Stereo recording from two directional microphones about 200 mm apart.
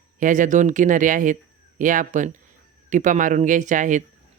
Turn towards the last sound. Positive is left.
turn(degrees=-40)  # may be behind; listen again after turning